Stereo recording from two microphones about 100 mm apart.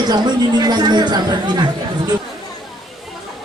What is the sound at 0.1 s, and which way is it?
A woman's voice, 45° right (ahead or behind).